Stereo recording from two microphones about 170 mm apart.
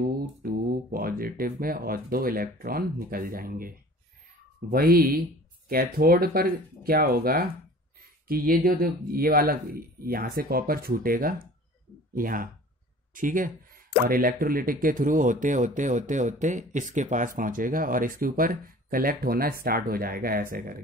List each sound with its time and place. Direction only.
0.1 s speech: 65° right (ahead or behind)